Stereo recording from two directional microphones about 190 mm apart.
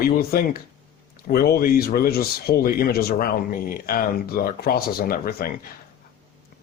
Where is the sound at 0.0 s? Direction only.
50° left (ahead or behind).